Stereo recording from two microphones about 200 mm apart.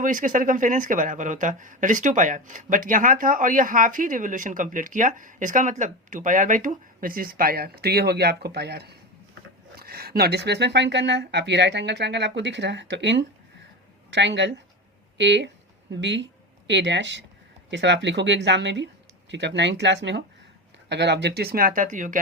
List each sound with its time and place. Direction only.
0.0 s speech: 40° right (ahead or behind)